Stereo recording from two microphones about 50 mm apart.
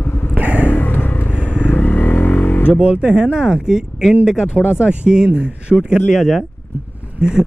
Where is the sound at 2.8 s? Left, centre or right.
Right.